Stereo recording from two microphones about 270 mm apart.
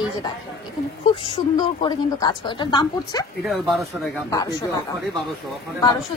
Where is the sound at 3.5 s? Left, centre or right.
Centre.